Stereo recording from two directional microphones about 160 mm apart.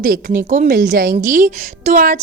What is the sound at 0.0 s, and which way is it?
A woman's voice, 60° right (ahead or behind).